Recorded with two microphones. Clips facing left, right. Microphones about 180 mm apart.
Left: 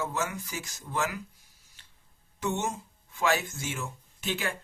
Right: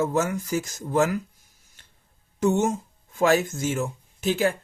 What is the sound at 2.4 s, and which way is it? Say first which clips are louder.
A man's voice: right 9 dB; 45° right (ahead or behind).